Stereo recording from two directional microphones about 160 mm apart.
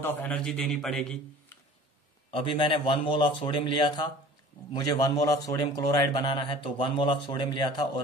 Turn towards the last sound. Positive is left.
turn(degrees=25)  # may be behind; listen again after turning